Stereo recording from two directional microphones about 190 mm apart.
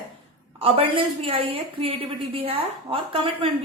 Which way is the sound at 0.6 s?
30° right (ahead or behind).